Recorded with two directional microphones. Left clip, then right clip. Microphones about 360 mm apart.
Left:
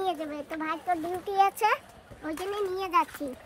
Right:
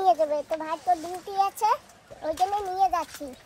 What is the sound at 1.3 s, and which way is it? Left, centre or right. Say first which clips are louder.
Speech: even; right.